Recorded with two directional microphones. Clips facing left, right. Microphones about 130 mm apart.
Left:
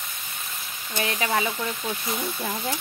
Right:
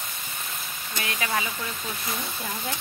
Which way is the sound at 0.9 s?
30° left (ahead or behind).